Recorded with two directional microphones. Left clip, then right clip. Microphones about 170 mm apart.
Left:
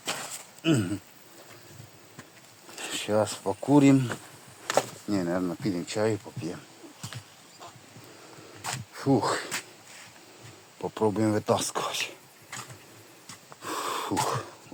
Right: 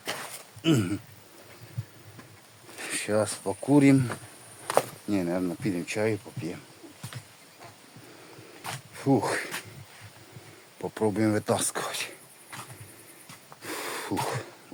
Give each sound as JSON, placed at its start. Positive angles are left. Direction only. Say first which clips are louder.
{"t": 0.6, "sound": "speech", "louder": "right 1 dB", "side_deg": -20}
{"t": 2.7, "sound": "speech", "louder": "left 1 dB", "side_deg": -10}
{"t": 8.6, "sound": "a sound", "louder": "left 3 dB", "side_deg": 75}
{"t": 9.0, "sound": "speech", "louder": "even", "side_deg": -10}
{"t": 10.8, "sound": "speech", "louder": "left 1 dB", "side_deg": -5}
{"t": 13.6, "sound": "gasp", "louder": "left 3 dB", "side_deg": 0}
{"t": 14.3, "sound": "a sound", "louder": "left 3 dB", "side_deg": -5}